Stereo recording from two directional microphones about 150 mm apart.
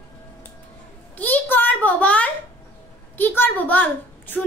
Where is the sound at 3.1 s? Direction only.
15° left (ahead or behind).